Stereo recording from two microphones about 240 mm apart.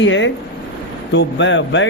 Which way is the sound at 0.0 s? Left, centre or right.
Left.